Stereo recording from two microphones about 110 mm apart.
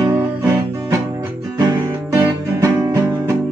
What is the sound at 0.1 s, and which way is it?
Music, 20° right (ahead or behind).